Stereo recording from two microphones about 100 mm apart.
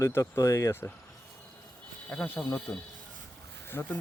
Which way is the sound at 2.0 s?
15° left (ahead or behind).